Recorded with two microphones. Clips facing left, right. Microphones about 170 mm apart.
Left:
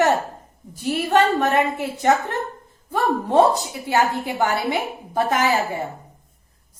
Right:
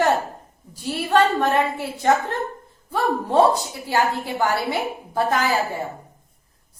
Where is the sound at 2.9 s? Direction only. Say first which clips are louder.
Left 1 dB; 20° left (ahead or behind).